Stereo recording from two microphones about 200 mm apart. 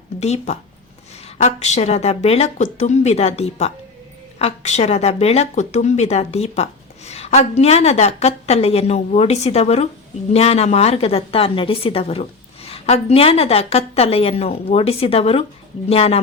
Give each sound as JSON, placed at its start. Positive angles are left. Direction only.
{"t": 0.2, "sound": "a woman's voice", "side_deg": 35}